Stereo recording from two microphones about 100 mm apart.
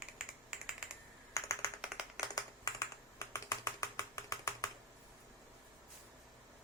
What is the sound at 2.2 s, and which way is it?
Clapping, 35° left (ahead or behind).